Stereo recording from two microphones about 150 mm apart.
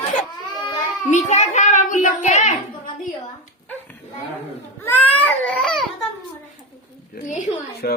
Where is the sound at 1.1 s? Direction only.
50° left (ahead or behind).